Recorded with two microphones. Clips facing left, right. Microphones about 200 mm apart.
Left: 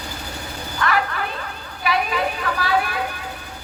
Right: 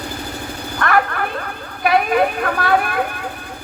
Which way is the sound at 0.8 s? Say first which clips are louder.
Right 4 dB; 55° right (ahead or behind).